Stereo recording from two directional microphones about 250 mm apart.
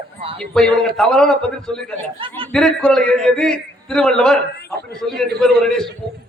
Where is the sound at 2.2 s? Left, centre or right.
Right.